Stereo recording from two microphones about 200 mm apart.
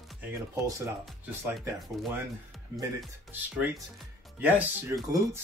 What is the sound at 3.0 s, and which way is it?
Speech, 10° right (ahead or behind).